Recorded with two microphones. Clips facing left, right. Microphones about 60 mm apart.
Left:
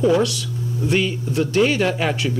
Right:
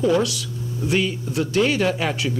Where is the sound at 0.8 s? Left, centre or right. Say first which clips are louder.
Left 1 dB; centre.